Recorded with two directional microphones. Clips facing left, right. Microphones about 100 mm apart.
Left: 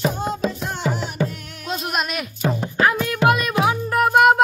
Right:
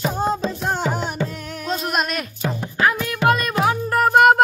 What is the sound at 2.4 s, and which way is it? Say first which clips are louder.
Music: left 1 dB; 25° left (ahead or behind).